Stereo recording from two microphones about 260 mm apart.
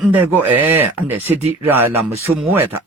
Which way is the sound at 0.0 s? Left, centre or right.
Centre.